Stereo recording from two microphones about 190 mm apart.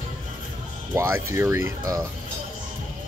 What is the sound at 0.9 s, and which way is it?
Speech, 10° right (ahead or behind).